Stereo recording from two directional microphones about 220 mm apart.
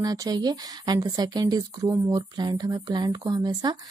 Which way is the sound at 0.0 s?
15° right (ahead or behind).